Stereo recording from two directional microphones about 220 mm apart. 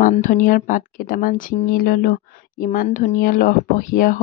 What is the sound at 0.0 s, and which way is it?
Speech, 35° left (ahead or behind).